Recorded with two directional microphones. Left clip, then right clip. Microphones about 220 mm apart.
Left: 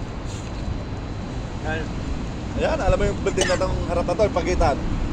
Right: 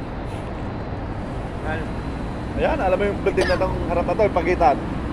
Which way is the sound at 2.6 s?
40° left (ahead or behind).